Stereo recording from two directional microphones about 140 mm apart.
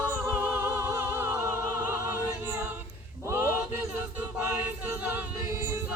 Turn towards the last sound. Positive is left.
turn(degrees=-15)  # may be behind; listen again after turning